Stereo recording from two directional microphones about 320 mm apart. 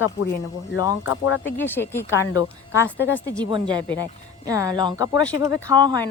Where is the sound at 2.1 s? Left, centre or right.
Left.